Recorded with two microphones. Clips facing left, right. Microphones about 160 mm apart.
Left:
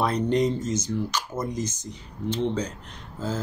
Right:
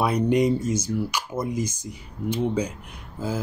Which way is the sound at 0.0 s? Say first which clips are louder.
Right 2 dB; 10° right (ahead or behind).